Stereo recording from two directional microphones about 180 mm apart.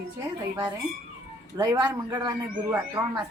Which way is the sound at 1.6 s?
20° right (ahead or behind).